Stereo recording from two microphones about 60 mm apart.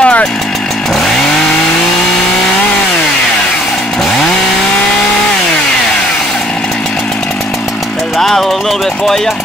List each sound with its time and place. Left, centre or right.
0.0 s chainsaw: centre
8.2 s music: centre